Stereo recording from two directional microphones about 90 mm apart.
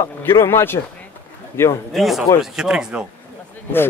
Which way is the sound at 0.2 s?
30° left (ahead or behind).